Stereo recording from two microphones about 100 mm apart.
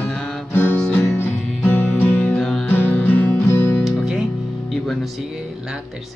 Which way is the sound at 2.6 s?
20° left (ahead or behind).